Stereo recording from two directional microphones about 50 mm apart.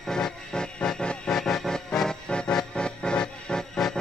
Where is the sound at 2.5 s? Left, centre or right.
Centre.